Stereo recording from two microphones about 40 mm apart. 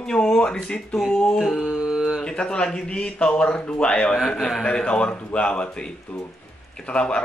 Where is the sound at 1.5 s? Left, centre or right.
Centre.